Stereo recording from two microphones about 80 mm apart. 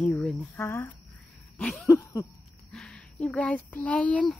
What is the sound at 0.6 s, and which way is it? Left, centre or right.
Speech, left.